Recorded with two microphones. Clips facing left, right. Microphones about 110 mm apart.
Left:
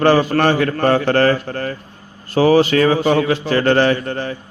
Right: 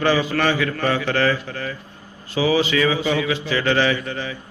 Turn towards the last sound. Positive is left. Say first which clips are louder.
# left 5 dB
turn(degrees=45)  # may be behind; listen again after turning